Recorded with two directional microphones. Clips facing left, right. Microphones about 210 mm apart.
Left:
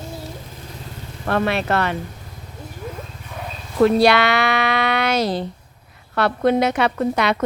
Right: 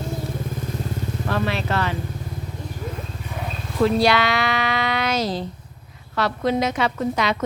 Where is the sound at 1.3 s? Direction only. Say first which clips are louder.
Left 5 dB; 60° left (ahead or behind).